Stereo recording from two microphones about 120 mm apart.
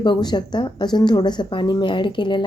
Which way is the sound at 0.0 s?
40° left (ahead or behind).